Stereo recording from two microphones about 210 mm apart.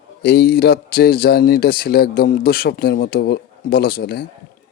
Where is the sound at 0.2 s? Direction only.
50° left (ahead or behind).